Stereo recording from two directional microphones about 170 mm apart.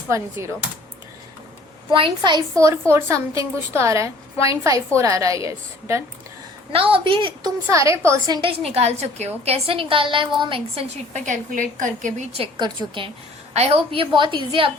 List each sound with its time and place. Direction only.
1.9 s a woman's voice: 30° right (ahead or behind)
6.7 s a woman's voice: 35° right (ahead or behind)
7.7 s a woman's voice: 20° right (ahead or behind)
8.4 s a woman's voice: 35° right (ahead or behind)
12.4 s a woman's voice: 25° right (ahead or behind)
13.5 s a woman's voice: 40° right (ahead or behind)